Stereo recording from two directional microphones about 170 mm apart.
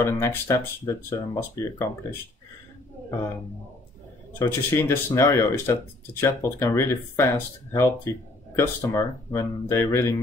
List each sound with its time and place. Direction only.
0.0 s speech: 15° left (ahead or behind)
4.4 s speech: 15° left (ahead or behind)